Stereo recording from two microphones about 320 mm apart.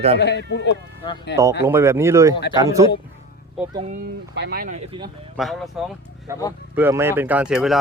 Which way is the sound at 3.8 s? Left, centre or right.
Right.